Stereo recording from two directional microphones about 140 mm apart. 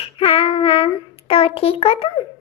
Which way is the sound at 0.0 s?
45° left (ahead or behind).